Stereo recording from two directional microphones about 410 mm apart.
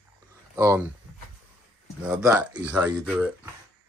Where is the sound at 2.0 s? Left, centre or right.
Centre.